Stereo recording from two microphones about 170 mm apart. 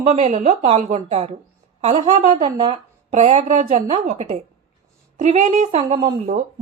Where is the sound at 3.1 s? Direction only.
45° right (ahead or behind).